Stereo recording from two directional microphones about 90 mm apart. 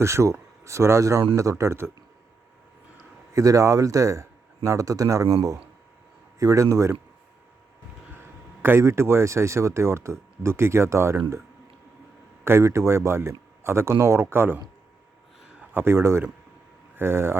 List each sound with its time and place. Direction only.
0.0 s speech: 30° right (ahead or behind)
3.3 s speech: 40° right (ahead or behind)
8.2 s speech: 25° right (ahead or behind)
12.5 s speech: 30° right (ahead or behind)
15.7 s speech: 30° right (ahead or behind)